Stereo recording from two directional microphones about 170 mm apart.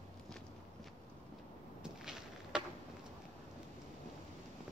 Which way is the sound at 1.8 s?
5° right (ahead or behind).